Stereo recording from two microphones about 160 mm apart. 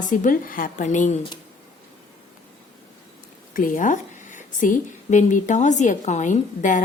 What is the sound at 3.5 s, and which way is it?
A woman's voice, 60° left (ahead or behind).